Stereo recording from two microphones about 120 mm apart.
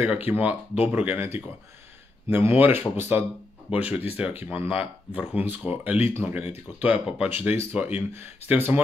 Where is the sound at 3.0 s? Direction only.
15° right (ahead or behind).